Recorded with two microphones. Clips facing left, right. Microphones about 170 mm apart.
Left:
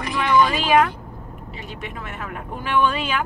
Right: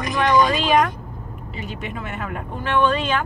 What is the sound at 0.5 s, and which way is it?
Speech, 5° left (ahead or behind).